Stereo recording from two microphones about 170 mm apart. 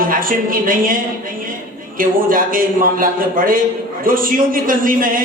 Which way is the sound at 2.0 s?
55° right (ahead or behind).